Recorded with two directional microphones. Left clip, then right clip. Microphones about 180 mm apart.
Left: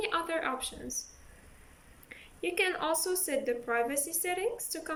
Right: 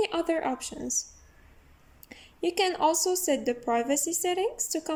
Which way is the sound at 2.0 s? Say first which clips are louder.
Right 5 dB; 35° right (ahead or behind).